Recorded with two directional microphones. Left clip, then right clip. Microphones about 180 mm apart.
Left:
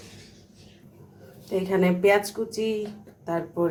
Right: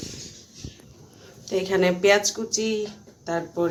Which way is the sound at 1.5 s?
Centre (ahead or behind).